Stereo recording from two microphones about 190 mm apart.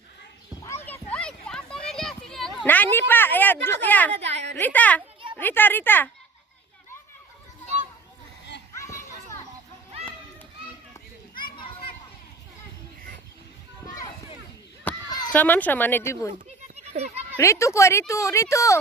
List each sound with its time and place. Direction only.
0.6 s a sound: 15° left (ahead or behind)
2.6 s a woman's voice: 10° left (ahead or behind)
8.7 s children playing: 15° left (ahead or behind)
11.5 s children playing: 25° left (ahead or behind)
14.9 s a sound: 10° left (ahead or behind)
15.3 s a woman's voice: 10° left (ahead or behind)
16.6 s children playing: 35° right (ahead or behind)
17.3 s a woman's voice: 15° left (ahead or behind)